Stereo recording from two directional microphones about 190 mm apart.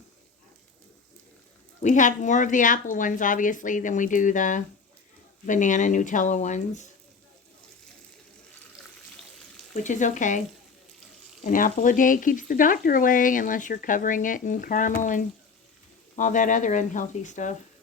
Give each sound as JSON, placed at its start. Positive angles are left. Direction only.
{"t": 1.8, "sound": "speech", "side_deg": 40}
{"t": 9.7, "sound": "speech", "side_deg": 40}
{"t": 11.4, "sound": "speech", "side_deg": 45}